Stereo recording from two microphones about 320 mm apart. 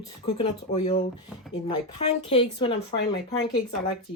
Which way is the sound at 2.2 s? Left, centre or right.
Centre.